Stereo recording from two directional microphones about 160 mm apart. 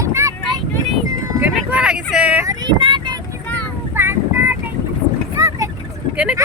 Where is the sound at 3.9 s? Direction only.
15° right (ahead or behind).